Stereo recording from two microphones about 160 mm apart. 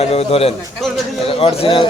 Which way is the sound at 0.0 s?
40° left (ahead or behind).